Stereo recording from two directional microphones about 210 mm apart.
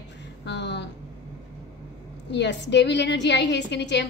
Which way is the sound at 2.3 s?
55° left (ahead or behind).